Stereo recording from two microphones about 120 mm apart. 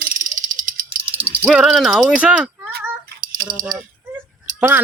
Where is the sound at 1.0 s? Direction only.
50° right (ahead or behind).